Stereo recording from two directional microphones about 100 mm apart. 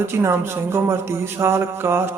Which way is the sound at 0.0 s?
25° right (ahead or behind).